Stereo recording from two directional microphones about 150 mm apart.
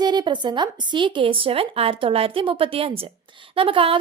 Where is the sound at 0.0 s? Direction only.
30° right (ahead or behind).